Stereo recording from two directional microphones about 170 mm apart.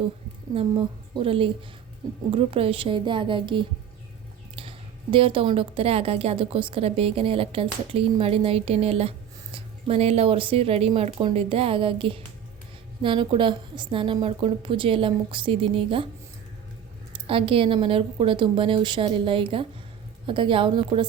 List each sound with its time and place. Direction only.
0.5 s a woman's voice: 35° right (ahead or behind)
5.1 s a woman's voice: 30° right (ahead or behind)
17.1 s a woman's voice: 30° right (ahead or behind)